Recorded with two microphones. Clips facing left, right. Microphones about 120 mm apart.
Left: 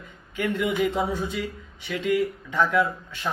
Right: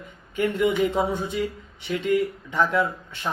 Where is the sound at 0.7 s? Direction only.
25° right (ahead or behind).